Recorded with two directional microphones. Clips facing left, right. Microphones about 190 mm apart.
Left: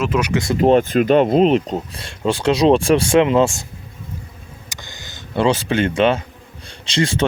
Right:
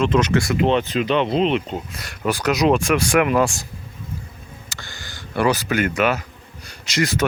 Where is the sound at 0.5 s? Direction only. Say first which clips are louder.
Left 8 dB; 45° left (ahead or behind); by 3.7 s 25° left (ahead or behind).